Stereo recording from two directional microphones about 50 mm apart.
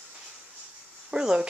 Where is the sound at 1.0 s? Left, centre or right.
Centre.